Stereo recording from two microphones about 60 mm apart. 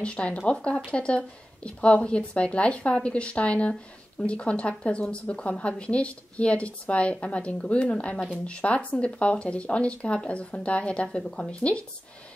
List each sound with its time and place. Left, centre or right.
0.0 s a woman's voice: centre